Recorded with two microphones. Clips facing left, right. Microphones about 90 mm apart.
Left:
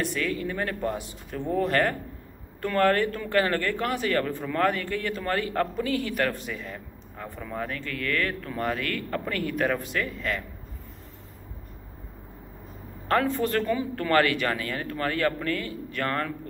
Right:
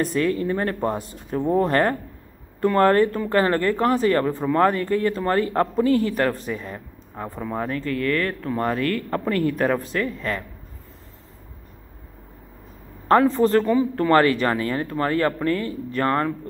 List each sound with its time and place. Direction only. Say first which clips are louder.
0.0 s a woman's voice: right 7 dB; 35° right (ahead or behind)
7.4 s speech: right 7 dB; 25° right (ahead or behind)
13.1 s speech: right 8 dB; 30° right (ahead or behind)